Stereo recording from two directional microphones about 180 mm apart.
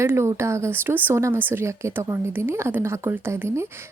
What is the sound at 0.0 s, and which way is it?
Speech, 15° right (ahead or behind).